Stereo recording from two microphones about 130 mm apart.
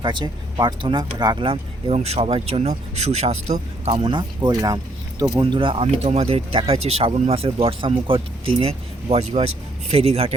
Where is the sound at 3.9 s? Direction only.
40° right (ahead or behind).